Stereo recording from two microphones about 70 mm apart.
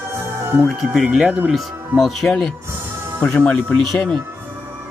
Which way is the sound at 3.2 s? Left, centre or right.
Left.